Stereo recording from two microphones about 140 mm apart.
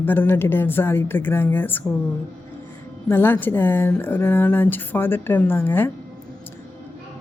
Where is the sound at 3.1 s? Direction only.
15° left (ahead or behind).